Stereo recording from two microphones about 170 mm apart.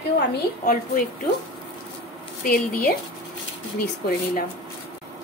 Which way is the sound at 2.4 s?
55° left (ahead or behind).